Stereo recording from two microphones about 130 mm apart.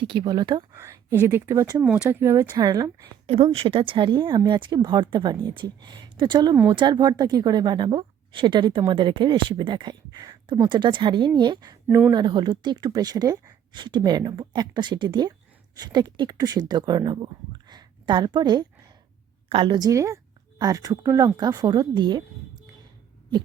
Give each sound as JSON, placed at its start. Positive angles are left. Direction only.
{"t": 0.0, "sound": "speech", "side_deg": -40}
{"t": 0.7, "sound": "speech", "side_deg": -20}
{"t": 1.8, "sound": "speech", "side_deg": -15}
{"t": 2.6, "sound": "speech", "side_deg": -30}
{"t": 3.2, "sound": "speech", "side_deg": -50}
{"t": 11.9, "sound": "speech", "side_deg": -20}
{"t": 12.1, "sound": "speech", "side_deg": -35}